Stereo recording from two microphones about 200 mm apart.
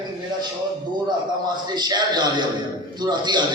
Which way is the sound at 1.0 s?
20° right (ahead or behind).